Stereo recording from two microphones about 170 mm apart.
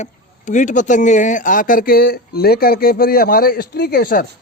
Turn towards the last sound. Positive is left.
turn(degrees=60)  # may be behind; listen again after turning